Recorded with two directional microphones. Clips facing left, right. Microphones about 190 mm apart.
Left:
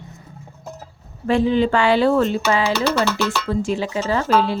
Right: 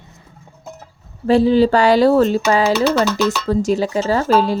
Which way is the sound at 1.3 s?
35° right (ahead or behind).